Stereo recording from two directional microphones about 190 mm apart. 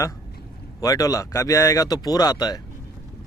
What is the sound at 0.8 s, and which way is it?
Speech, 20° left (ahead or behind).